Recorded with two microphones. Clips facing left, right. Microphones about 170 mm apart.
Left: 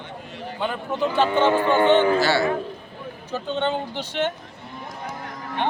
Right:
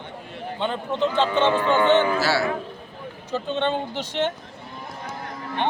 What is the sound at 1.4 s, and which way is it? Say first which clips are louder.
Speech: left 1 dB; 10° left (ahead or behind).